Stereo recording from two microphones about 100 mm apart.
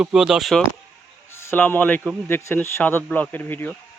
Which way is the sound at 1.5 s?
20° left (ahead or behind).